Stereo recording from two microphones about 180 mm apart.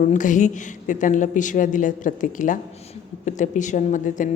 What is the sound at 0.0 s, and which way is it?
A woman's voice, 45° left (ahead or behind).